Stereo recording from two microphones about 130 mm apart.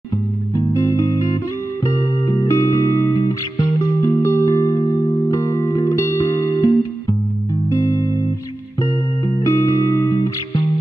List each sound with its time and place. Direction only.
0.6 s music: 25° left (ahead or behind)
9.3 s music: 25° left (ahead or behind)